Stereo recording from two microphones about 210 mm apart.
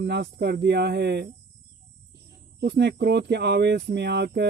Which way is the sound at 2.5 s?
55° right (ahead or behind).